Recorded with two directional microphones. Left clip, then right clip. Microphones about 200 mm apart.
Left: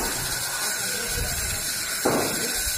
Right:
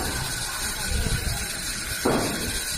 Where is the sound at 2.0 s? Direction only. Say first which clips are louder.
Even; 20° right (ahead or behind).